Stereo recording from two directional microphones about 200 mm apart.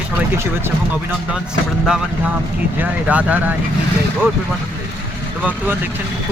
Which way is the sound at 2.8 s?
5° right (ahead or behind).